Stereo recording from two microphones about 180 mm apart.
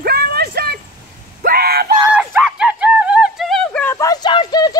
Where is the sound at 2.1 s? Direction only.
5° right (ahead or behind).